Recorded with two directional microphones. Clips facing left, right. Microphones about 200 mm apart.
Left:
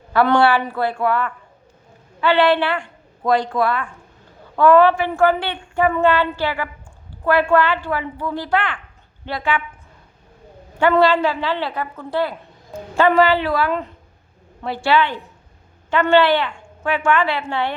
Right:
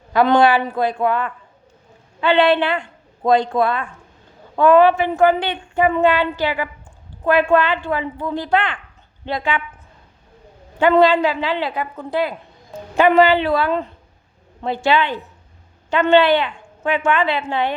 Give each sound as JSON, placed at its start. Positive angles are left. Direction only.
{"t": 0.1, "sound": "a woman's voice", "side_deg": -15}
{"t": 10.8, "sound": "a woman's voice", "side_deg": -20}
{"t": 14.8, "sound": "a woman's voice", "side_deg": -20}